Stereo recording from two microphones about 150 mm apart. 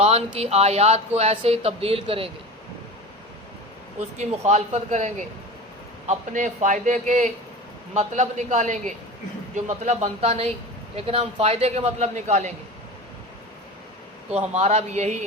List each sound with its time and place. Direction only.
0.3 s speech: 45° right (ahead or behind)
4.2 s a man's voice: 50° right (ahead or behind)
14.3 s speech: 45° right (ahead or behind)